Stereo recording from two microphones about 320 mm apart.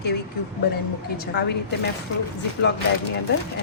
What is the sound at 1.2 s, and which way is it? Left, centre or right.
Speech, left.